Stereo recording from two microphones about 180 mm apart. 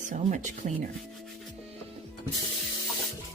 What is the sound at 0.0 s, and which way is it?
Speech, 45° right (ahead or behind).